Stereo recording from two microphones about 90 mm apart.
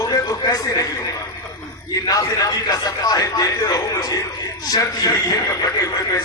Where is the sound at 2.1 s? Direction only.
40° left (ahead or behind).